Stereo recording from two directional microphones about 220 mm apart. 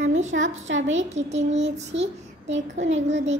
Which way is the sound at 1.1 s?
30° right (ahead or behind).